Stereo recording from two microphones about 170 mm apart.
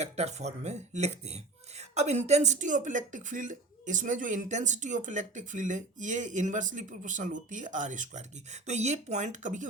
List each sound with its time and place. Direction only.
0.0 s speech: 40° right (ahead or behind)